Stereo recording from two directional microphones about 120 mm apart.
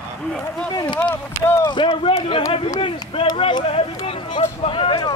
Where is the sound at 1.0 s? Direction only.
20° left (ahead or behind).